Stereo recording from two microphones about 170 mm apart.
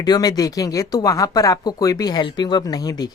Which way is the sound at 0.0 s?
25° left (ahead or behind).